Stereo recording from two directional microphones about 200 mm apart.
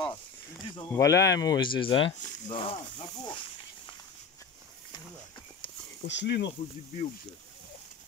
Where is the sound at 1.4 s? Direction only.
20° left (ahead or behind).